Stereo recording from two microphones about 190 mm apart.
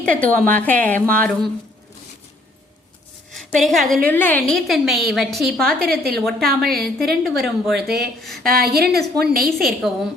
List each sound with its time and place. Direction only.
0.0 s speech: 5° left (ahead or behind)
3.3 s a woman's voice: centre (ahead or behind)
6.5 s a woman's voice: 55° right (ahead or behind)
7.3 s a woman's voice: centre (ahead or behind)
7.9 s a woman's voice: 55° right (ahead or behind)
9.6 s a woman's voice: centre (ahead or behind)